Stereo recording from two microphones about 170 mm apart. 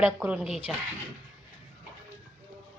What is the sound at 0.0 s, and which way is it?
Speech, 5° right (ahead or behind).